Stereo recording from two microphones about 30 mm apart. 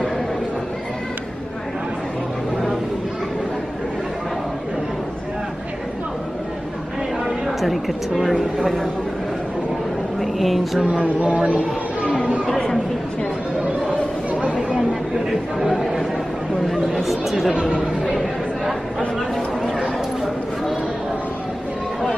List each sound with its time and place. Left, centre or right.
7.2 s a sound: centre
10.2 s speech: centre
11.5 s a sound: right
15.1 s speech: centre
16.6 s speech: centre
17.6 s speech: right
18.7 s speech: centre